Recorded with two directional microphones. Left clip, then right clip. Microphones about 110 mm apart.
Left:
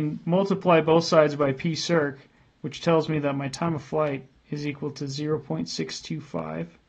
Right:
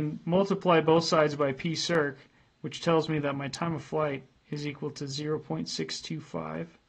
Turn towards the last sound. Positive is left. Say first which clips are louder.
# left 4 dB
turn(degrees=-20)  # may be behind; listen again after turning